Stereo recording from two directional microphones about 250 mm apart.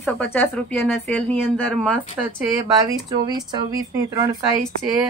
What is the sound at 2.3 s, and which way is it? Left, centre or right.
Speech, centre.